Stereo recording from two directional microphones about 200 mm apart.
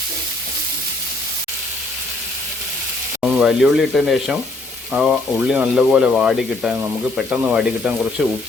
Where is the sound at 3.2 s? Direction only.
5° right (ahead or behind).